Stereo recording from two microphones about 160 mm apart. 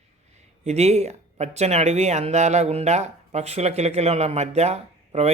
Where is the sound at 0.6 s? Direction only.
40° right (ahead or behind).